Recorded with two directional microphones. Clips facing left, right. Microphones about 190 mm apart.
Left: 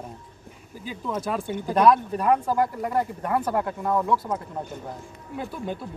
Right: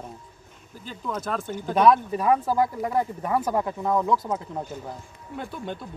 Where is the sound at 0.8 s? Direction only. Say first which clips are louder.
Left 2 dB; 10° left (ahead or behind).